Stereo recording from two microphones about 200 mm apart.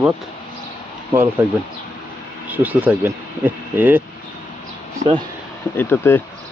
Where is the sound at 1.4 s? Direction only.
10° right (ahead or behind).